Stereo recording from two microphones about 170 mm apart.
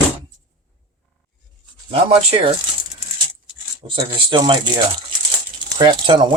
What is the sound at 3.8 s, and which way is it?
Speech, 30° right (ahead or behind).